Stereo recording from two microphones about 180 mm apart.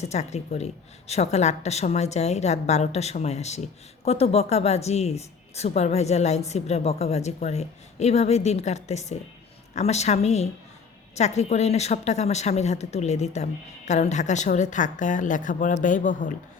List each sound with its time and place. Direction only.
0.0 s a woman's voice: 40° left (ahead or behind)